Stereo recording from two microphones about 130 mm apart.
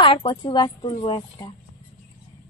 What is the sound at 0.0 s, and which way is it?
Speech, 40° left (ahead or behind).